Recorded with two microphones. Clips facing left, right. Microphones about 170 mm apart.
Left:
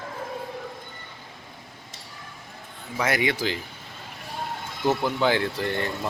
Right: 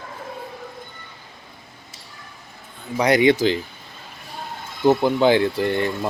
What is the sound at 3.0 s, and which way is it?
Speech, 20° right (ahead or behind).